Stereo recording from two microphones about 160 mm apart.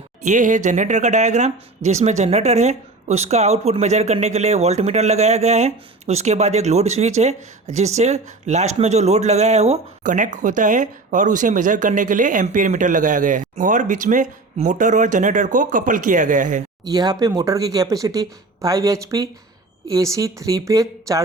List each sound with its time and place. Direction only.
0.2 s speech: 50° right (ahead or behind)
16.8 s speech: 25° right (ahead or behind)